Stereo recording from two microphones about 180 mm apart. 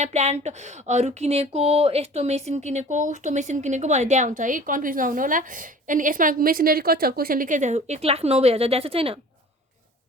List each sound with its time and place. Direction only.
0.0 s speech: 40° right (ahead or behind)